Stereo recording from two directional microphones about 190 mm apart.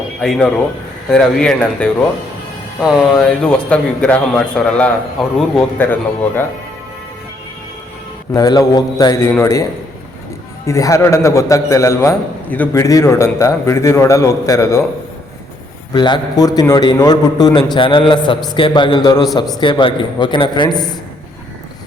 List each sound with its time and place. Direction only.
0.2 s a man's voice: 5° left (ahead or behind)
8.3 s a man's voice: 20° left (ahead or behind)
10.7 s a man's voice: 15° left (ahead or behind)
15.9 s a man's voice: 25° left (ahead or behind)